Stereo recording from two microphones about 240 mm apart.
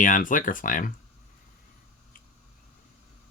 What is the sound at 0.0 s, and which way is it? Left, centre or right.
Speech, left.